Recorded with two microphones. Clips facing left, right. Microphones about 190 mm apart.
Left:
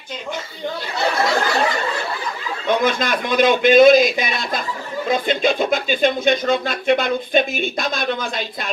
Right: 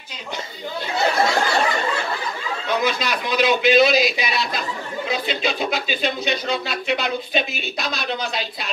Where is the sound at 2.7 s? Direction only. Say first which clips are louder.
Left 4 dB; 50° left (ahead or behind).